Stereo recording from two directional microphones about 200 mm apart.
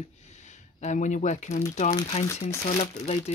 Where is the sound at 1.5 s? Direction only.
15° left (ahead or behind).